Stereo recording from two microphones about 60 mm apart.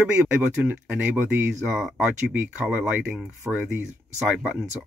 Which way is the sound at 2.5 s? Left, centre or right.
Centre.